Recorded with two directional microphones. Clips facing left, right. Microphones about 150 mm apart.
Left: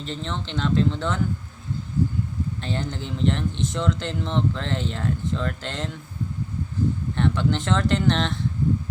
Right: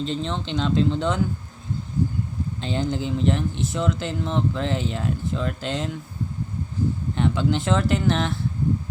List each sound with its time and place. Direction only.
0.0 s speech: 15° right (ahead or behind)
2.6 s speech: 15° right (ahead or behind)
7.2 s speech: 10° right (ahead or behind)